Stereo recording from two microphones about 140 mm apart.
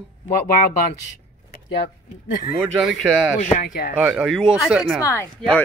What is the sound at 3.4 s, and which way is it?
Speech, 80° left.